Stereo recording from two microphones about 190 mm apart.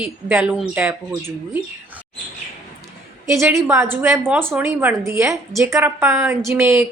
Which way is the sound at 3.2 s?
15° right (ahead or behind).